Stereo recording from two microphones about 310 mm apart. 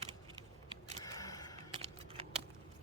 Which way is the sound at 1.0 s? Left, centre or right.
Centre.